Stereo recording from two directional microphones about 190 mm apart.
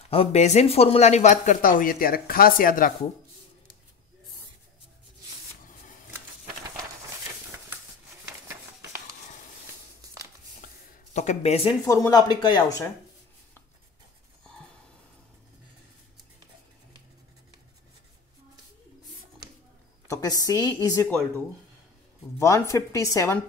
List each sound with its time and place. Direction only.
0.1 s speech: 35° left (ahead or behind)
7.7 s a sound: 15° right (ahead or behind)
11.1 s speech: 35° left (ahead or behind)
11.8 s speech: 20° left (ahead or behind)
20.1 s a woman's voice: 20° left (ahead or behind)
22.4 s a woman's voice: 15° left (ahead or behind)